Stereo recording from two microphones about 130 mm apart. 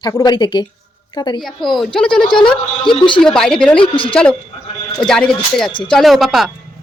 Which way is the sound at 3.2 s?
5° left (ahead or behind).